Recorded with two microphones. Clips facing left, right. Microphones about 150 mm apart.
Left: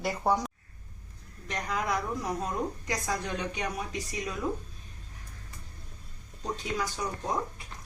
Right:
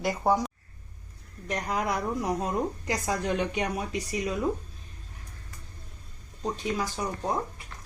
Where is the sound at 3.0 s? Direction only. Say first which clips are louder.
Right 6 dB; 20° right (ahead or behind).